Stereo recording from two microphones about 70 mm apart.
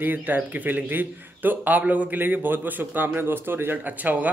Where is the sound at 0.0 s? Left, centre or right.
Right.